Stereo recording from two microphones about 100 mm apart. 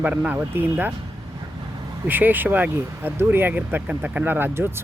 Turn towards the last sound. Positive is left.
turn(degrees=-25)  # may be behind; listen again after turning